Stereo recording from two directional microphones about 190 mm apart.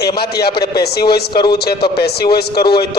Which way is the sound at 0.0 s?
55° left (ahead or behind).